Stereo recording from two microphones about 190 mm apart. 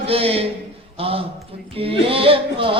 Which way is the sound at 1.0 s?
30° right (ahead or behind).